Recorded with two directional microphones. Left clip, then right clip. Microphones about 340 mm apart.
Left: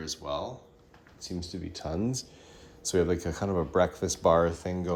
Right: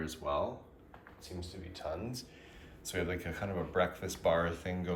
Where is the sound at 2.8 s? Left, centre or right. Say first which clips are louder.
Left 10 dB; left.